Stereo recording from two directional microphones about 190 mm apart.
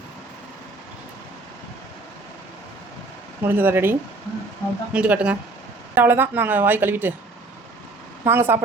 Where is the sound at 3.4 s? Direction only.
10° right (ahead or behind).